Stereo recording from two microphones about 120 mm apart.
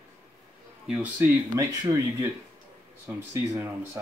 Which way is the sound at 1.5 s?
30° right (ahead or behind).